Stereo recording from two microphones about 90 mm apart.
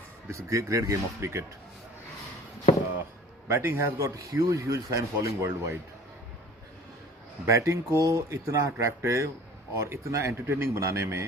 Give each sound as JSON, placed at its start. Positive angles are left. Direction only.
{"t": 0.3, "sound": "a man's voice", "side_deg": -35}
{"t": 3.5, "sound": "a man's voice", "side_deg": -30}
{"t": 7.4, "sound": "a man's voice", "side_deg": -35}